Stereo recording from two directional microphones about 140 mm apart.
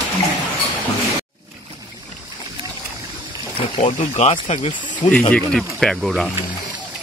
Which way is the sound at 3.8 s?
50° left (ahead or behind).